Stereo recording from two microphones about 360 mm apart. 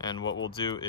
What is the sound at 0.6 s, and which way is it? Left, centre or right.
Speech, centre.